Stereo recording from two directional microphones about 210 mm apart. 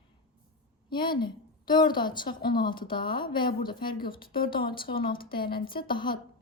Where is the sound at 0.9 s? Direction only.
20° left (ahead or behind).